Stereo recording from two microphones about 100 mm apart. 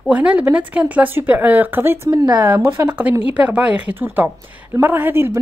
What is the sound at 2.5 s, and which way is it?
A woman's voice, 20° right (ahead or behind).